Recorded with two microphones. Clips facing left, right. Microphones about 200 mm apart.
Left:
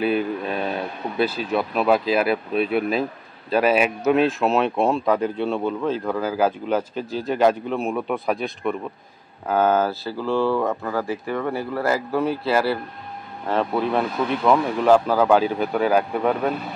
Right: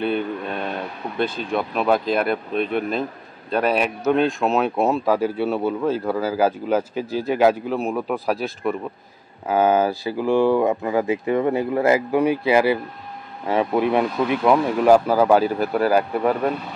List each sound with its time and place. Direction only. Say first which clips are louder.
0.0 s speech: left 1 dB; 5° left (ahead or behind)